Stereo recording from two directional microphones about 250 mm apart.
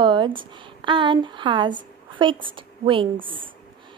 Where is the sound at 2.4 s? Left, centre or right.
Centre.